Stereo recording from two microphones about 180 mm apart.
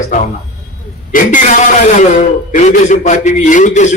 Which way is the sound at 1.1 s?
45° left (ahead or behind).